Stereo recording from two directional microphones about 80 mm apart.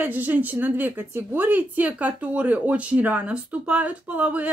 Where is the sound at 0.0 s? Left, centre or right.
Right.